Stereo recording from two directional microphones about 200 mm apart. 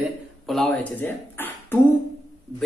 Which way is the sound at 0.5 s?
5° left (ahead or behind).